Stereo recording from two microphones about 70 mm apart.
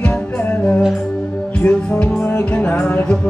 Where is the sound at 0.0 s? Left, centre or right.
Left.